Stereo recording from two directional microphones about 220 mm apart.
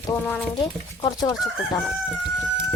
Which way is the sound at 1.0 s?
15° left (ahead or behind).